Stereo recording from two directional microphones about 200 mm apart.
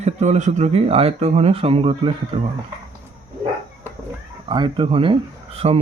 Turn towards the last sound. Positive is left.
turn(degrees=-30)  # may be behind; listen again after turning